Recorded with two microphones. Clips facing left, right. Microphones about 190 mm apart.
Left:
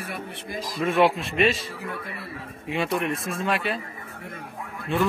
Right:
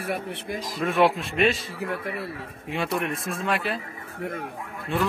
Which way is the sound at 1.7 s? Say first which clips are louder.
Right 5 dB; 70° right (ahead or behind).